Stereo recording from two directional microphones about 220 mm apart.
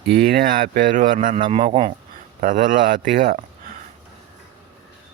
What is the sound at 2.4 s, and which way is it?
Speech, 35° right (ahead or behind).